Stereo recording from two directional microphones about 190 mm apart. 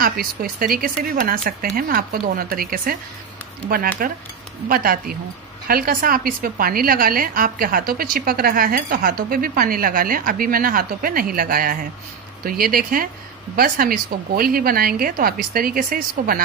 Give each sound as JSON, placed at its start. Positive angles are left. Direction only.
{"t": 0.0, "sound": "a woman's voice", "side_deg": -50}